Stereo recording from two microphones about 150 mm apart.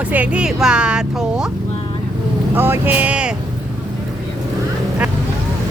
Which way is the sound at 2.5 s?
15° right (ahead or behind).